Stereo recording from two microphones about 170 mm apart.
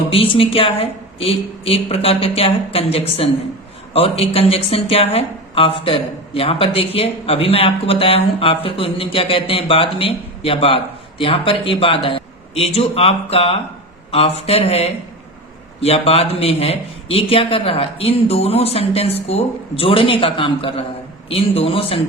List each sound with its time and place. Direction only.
0.1 s speech: 35° left (ahead or behind)